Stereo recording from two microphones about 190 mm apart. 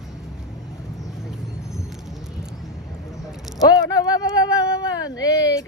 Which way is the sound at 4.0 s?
20° left (ahead or behind).